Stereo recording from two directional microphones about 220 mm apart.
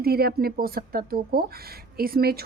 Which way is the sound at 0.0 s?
45° right (ahead or behind).